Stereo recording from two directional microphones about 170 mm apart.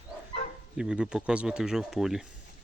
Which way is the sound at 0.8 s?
5° right (ahead or behind).